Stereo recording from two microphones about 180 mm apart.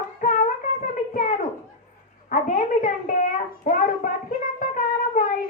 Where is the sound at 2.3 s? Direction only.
45° left (ahead or behind).